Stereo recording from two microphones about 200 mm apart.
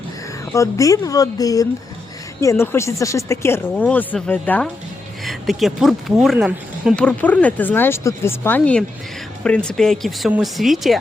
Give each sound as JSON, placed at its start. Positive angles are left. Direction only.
{"t": 0.5, "sound": "speech", "side_deg": 15}